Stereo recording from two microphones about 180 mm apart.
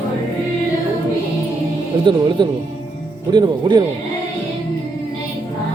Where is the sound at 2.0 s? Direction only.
25° right (ahead or behind).